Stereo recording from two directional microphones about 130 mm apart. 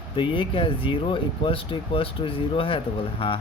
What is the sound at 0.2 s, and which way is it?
Speech, 40° left (ahead or behind).